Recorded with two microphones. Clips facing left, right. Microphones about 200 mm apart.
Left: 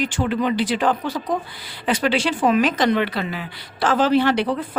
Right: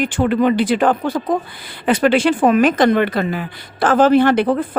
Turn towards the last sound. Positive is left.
turn(degrees=-50)  # may be behind; listen again after turning